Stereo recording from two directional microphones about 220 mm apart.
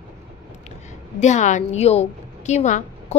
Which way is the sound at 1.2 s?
30° left (ahead or behind).